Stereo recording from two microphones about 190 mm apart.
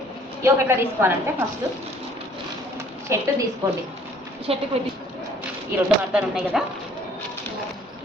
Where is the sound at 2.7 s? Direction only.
15° right (ahead or behind).